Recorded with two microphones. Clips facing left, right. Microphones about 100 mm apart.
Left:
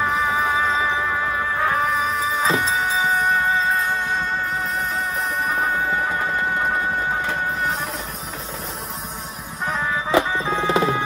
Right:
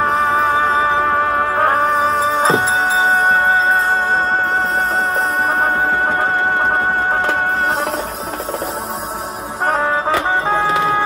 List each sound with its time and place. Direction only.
0.1 s music: 35° right (ahead or behind)
0.4 s music: 55° right (ahead or behind)
1.8 s music: 35° right (ahead or behind)
5.5 s music: 70° right (ahead or behind)
5.8 s music: 55° right (ahead or behind); by 7.7 s 70° right (ahead or behind)
9.7 s music: 65° right (ahead or behind)